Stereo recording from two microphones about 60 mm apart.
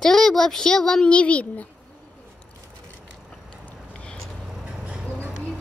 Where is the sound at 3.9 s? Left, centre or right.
Centre.